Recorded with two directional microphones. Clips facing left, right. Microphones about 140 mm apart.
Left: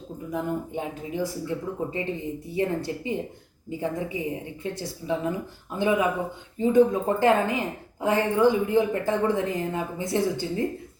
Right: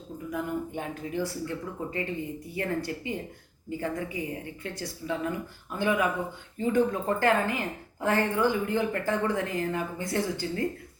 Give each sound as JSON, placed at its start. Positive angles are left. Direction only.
{"t": 0.3, "sound": "a woman's voice", "side_deg": 20}